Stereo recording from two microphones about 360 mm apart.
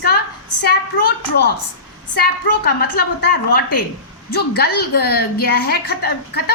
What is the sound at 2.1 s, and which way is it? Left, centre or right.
A woman's voice, left.